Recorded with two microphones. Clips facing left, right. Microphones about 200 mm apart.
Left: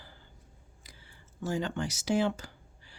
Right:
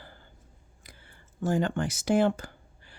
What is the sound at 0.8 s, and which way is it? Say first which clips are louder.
A woman's voice: right 3 dB; 55° right (ahead or behind).